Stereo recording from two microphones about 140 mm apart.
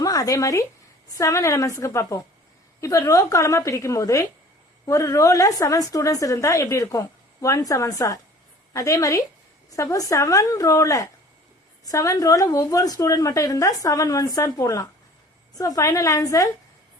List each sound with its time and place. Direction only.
0.0 s a woman's voice: 25° left (ahead or behind)